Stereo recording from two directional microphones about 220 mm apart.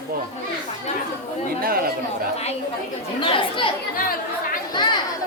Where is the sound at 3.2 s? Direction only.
25° left (ahead or behind).